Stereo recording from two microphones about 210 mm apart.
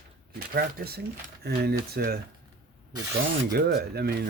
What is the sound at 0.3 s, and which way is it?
Speech, 50° right (ahead or behind).